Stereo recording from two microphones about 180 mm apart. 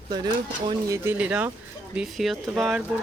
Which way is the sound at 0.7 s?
20° right (ahead or behind).